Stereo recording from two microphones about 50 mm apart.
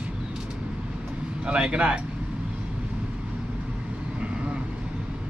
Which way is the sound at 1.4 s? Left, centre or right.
Centre.